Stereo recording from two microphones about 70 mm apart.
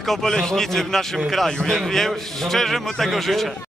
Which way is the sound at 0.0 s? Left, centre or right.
Centre.